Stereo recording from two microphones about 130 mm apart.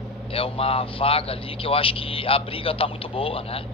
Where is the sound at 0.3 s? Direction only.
45° left (ahead or behind).